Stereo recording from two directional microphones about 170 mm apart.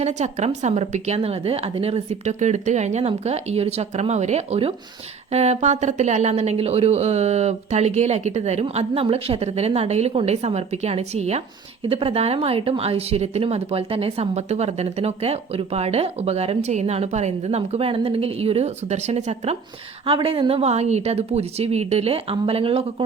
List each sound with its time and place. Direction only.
0.0 s speech: 40° right (ahead or behind)